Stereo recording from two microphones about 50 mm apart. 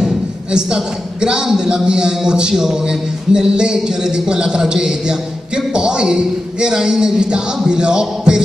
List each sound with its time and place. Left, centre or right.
0.5 s a man's voice: centre